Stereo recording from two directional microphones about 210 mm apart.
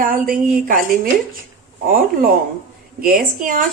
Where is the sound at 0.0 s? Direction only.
45° right (ahead or behind).